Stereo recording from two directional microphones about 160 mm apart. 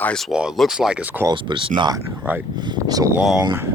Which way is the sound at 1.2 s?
30° right (ahead or behind).